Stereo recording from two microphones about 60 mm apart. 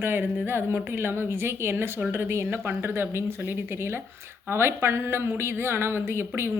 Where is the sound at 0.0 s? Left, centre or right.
Right.